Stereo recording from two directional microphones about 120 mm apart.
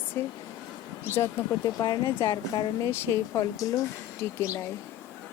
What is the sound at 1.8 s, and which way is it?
Speech, 35° left (ahead or behind).